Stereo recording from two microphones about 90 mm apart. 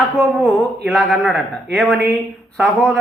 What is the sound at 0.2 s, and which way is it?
Speech, centre (ahead or behind).